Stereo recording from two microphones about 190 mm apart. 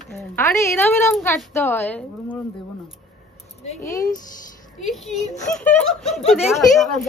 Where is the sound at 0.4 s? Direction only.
10° left (ahead or behind).